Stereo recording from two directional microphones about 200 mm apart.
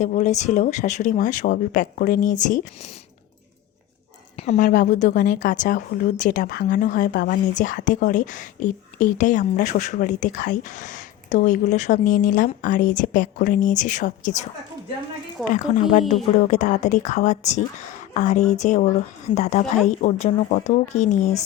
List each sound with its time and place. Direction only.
0.0 s a woman's voice: 35° left (ahead or behind)
4.4 s a woman's voice: 40° left (ahead or behind)
15.5 s a woman's voice: 40° left (ahead or behind)